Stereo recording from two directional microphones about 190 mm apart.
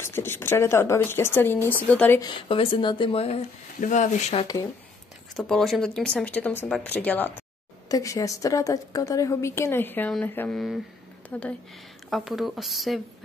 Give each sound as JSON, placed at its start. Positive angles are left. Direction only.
{"t": 0.0, "sound": "a woman's voice", "side_deg": 10}
{"t": 2.2, "sound": "speech", "side_deg": 30}
{"t": 5.3, "sound": "a woman's voice", "side_deg": 0}